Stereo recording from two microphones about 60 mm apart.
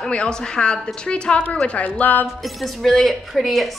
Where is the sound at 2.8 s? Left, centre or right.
Centre.